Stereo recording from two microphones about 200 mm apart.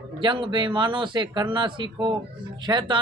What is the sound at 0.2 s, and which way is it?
A man's voice, 25° right (ahead or behind).